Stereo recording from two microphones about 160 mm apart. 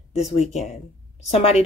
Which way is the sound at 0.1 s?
40° left (ahead or behind).